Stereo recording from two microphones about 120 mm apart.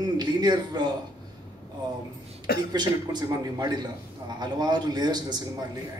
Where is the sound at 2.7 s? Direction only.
35° right (ahead or behind).